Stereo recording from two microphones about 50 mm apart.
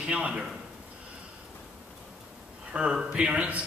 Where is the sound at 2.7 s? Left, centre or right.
Centre.